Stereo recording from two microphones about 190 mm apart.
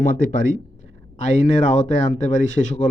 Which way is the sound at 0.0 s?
45° left (ahead or behind).